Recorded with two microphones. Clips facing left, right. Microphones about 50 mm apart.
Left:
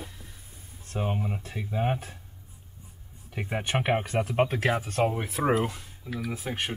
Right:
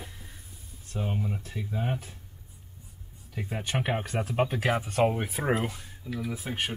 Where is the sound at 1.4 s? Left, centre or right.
Left.